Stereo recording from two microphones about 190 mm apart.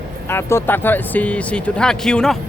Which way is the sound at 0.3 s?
15° left (ahead or behind).